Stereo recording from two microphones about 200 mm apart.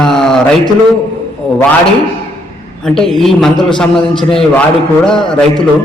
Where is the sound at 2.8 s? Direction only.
Centre (ahead or behind).